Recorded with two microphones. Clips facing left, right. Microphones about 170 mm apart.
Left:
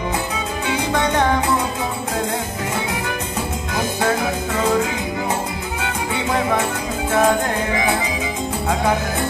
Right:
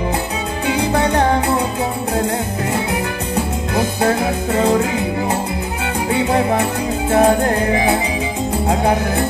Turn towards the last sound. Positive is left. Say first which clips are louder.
# right 5 dB
turn(degrees=-35)  # may be behind; listen again after turning